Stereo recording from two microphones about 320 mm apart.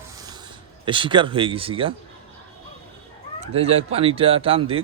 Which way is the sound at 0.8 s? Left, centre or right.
Centre.